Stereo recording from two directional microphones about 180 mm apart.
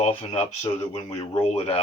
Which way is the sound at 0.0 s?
35° left (ahead or behind).